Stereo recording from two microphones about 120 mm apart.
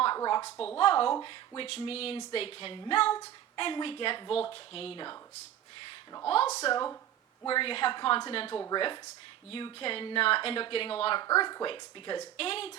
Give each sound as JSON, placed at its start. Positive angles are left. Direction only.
{"t": 0.2, "sound": "a sound", "side_deg": 35}
{"t": 0.5, "sound": "speech", "side_deg": 10}
{"t": 0.8, "sound": "a woman's voice", "side_deg": 50}
{"t": 6.2, "sound": "speech", "side_deg": 55}
{"t": 7.4, "sound": "a woman's voice", "side_deg": 45}
{"t": 11.3, "sound": "a woman's voice", "side_deg": 40}
{"t": 12.4, "sound": "a woman's voice", "side_deg": 55}